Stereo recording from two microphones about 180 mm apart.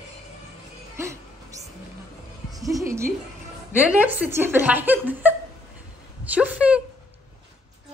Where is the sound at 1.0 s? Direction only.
15° right (ahead or behind).